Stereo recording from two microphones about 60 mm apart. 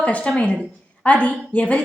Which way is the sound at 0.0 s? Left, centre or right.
Left.